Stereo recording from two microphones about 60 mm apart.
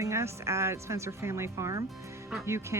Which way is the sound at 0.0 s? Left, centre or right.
Right.